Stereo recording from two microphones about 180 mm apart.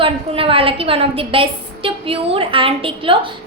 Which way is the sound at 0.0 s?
30° right (ahead or behind).